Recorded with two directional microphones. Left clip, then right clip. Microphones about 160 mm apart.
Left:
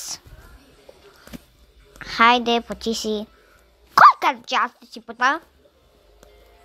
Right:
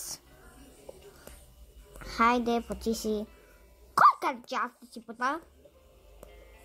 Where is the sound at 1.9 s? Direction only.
15° left (ahead or behind).